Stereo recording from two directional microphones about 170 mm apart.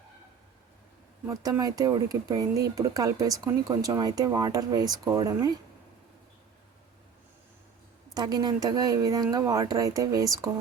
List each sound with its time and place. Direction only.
1.3 s speech: 20° right (ahead or behind)
8.1 s speech: 25° right (ahead or behind)